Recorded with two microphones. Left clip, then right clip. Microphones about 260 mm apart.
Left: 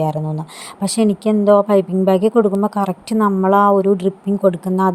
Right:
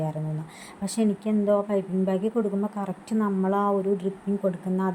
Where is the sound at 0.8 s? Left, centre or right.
Left.